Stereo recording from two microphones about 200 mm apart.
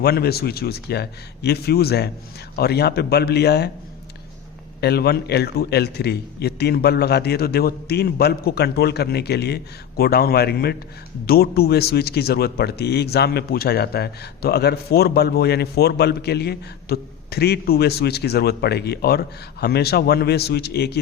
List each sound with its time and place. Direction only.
0.0 s a man's voice: 50° left (ahead or behind)
4.8 s a man's voice: 55° left (ahead or behind)